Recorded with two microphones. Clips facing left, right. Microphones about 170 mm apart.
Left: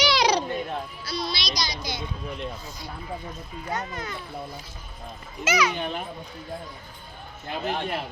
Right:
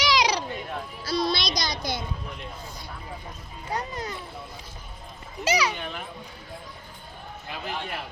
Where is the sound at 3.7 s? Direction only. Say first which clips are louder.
Right 1 dB; 35° right (ahead or behind).